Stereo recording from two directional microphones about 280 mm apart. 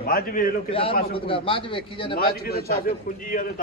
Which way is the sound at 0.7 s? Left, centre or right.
Centre.